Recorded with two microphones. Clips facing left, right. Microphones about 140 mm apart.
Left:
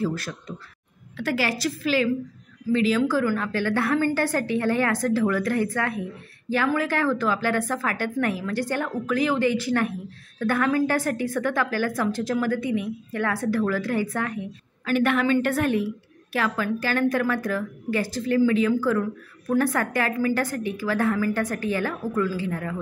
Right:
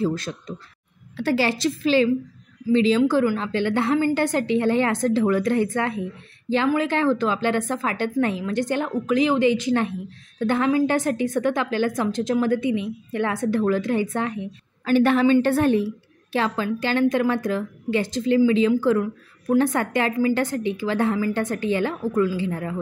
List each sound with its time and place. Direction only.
0.0 s a woman's voice: 20° right (ahead or behind)